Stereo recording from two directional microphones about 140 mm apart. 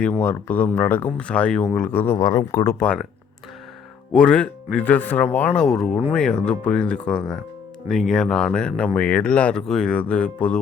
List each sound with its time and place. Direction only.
0.2 s speech: 10° left (ahead or behind)
4.1 s speech: 5° left (ahead or behind)